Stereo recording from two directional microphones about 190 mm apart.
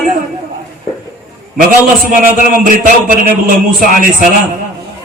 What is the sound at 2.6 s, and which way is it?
Speech, 45° right (ahead or behind).